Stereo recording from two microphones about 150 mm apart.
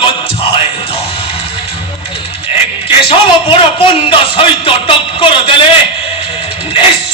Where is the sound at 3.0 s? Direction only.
35° left (ahead or behind).